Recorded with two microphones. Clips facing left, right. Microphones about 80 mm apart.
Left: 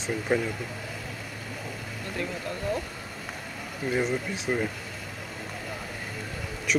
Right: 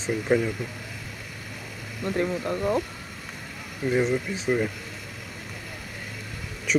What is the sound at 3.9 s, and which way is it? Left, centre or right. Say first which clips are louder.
Speech: right 4 dB; centre.